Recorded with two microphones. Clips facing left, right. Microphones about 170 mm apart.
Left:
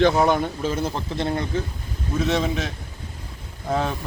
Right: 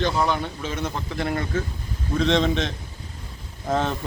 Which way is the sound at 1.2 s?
20° left (ahead or behind).